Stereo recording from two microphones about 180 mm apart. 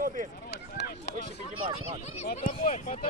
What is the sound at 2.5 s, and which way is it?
Speech, 40° left (ahead or behind).